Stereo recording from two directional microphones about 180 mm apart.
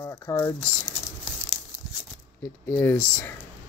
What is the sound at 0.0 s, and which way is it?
Speech, 15° left (ahead or behind).